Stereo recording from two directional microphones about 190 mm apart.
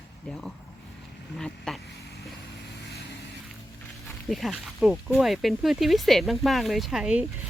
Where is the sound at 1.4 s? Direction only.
5° left (ahead or behind).